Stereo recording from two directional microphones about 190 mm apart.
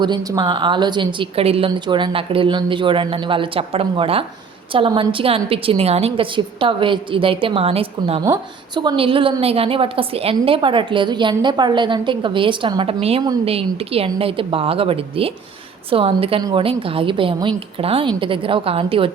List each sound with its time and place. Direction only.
0.0 s a woman's voice: 20° right (ahead or behind)